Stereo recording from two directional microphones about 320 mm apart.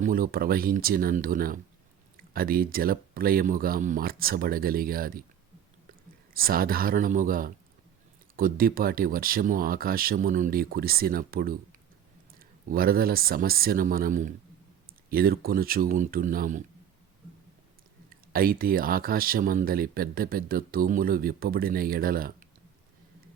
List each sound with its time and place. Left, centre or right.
0.0 s speech: right
6.3 s speech: right
18.1 s speech: right